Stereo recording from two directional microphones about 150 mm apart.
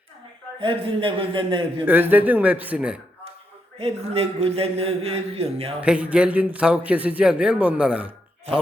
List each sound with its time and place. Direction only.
0.6 s speech: 35° right (ahead or behind)
1.8 s a man's voice: 10° right (ahead or behind)
3.8 s speech: 40° right (ahead or behind)
5.8 s a man's voice: 10° right (ahead or behind)